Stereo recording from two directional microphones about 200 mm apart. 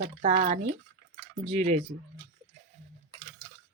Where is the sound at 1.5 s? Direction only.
35° right (ahead or behind).